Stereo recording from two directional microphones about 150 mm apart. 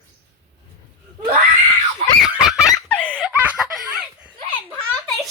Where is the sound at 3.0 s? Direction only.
10° left (ahead or behind).